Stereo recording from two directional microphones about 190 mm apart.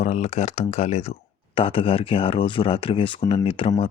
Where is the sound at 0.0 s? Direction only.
35° left (ahead or behind).